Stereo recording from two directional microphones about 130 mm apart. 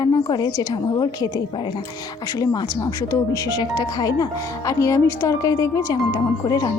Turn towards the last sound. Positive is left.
turn(degrees=30)  # may be behind; listen again after turning